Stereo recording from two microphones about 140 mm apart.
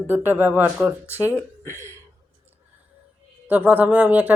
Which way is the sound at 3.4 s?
10° right (ahead or behind).